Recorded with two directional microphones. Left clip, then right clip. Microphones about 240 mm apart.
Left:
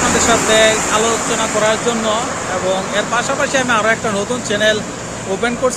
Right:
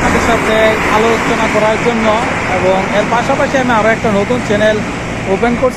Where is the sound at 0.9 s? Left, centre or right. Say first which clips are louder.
Right 4 dB; left.